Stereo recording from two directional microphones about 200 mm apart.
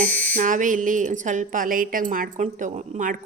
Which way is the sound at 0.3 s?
40° right (ahead or behind).